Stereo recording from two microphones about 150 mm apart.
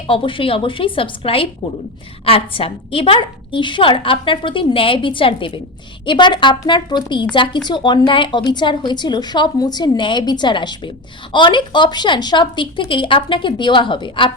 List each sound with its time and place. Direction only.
0.1 s a woman's voice: 35° left (ahead or behind)